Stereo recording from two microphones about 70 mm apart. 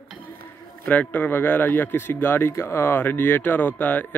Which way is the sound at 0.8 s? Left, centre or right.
Left.